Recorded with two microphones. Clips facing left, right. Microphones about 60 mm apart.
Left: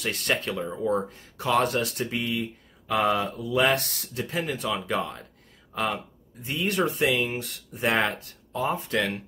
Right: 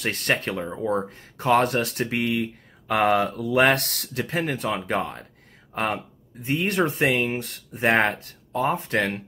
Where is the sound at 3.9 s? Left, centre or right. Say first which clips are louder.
Right 4 dB; right.